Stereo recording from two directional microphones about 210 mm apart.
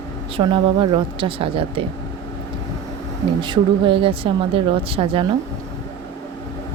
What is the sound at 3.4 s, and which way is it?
A woman's voice, 25° right (ahead or behind).